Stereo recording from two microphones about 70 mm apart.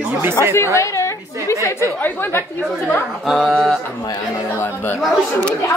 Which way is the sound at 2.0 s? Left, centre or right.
Left.